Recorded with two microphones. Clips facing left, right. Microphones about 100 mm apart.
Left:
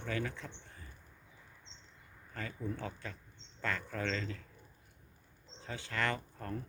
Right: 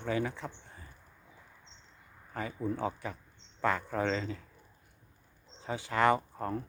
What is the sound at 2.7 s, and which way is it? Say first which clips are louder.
Speech: right 9 dB; 15° right (ahead or behind).